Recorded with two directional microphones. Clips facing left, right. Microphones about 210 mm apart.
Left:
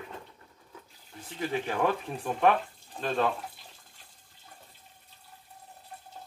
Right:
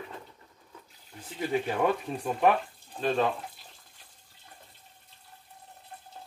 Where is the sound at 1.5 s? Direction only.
10° right (ahead or behind).